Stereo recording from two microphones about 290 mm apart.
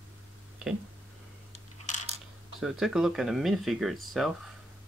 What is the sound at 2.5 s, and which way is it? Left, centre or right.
Speech, centre.